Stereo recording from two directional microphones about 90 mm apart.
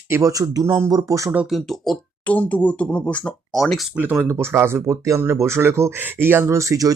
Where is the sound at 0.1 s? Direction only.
40° right (ahead or behind).